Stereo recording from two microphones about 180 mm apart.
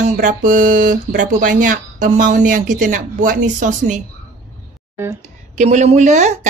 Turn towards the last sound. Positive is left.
turn(degrees=-40)  # may be behind; listen again after turning